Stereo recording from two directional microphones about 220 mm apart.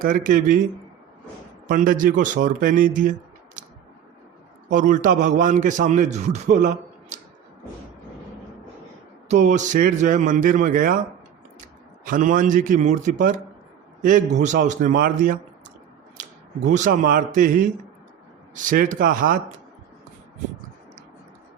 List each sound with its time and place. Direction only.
0.0 s a man's voice: 40° right (ahead or behind)
1.6 s a man's voice: 35° right (ahead or behind)
4.7 s a man's voice: 35° right (ahead or behind)
9.3 s a man's voice: 35° right (ahead or behind)
12.0 s a man's voice: 35° right (ahead or behind)
16.6 s a man's voice: 35° right (ahead or behind)